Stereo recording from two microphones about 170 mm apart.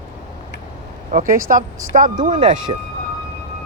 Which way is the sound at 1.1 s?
55° right (ahead or behind).